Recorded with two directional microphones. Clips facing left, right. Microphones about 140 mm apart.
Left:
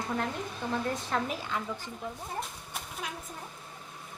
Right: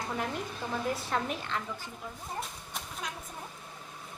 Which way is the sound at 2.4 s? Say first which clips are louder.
Left 1 dB; 5° left (ahead or behind).